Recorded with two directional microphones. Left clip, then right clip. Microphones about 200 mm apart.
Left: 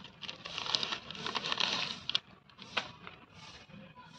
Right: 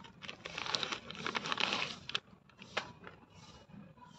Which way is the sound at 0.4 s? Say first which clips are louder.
Left 3 dB; 20° right (ahead or behind).